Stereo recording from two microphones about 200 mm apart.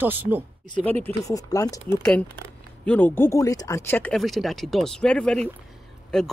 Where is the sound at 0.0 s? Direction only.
10° right (ahead or behind).